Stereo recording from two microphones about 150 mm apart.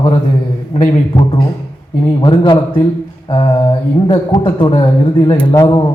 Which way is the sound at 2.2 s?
35° left (ahead or behind).